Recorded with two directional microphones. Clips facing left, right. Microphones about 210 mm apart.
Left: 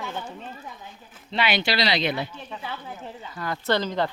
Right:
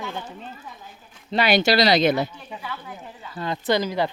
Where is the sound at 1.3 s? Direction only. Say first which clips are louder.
Right 6 dB; 40° right (ahead or behind).